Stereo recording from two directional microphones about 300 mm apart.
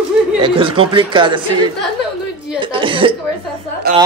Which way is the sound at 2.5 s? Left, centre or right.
Centre.